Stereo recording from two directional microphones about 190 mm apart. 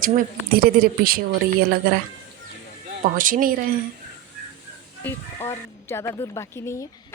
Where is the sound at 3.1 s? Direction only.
45° right (ahead or behind).